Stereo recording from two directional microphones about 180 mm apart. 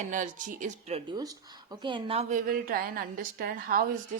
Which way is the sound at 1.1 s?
20° right (ahead or behind).